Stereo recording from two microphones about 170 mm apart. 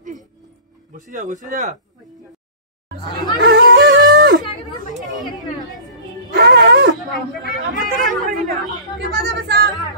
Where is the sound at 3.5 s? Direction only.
90° right.